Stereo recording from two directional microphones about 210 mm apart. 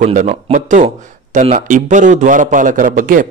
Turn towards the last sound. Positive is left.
turn(degrees=-40)  # may be behind; listen again after turning